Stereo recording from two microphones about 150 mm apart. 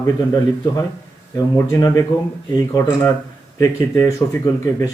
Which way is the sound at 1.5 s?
20° left (ahead or behind).